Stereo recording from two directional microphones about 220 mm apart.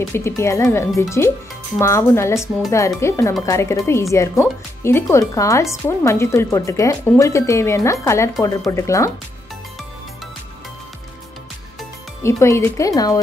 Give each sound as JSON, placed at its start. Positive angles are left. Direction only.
{"t": 0.1, "sound": "speech", "side_deg": 10}
{"t": 12.2, "sound": "speech", "side_deg": 15}